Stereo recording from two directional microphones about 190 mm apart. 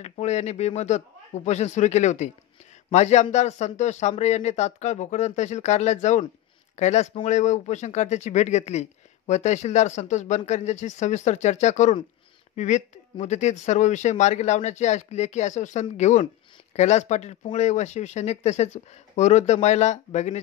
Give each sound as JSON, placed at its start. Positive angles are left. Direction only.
{"t": 0.0, "sound": "speech", "side_deg": 35}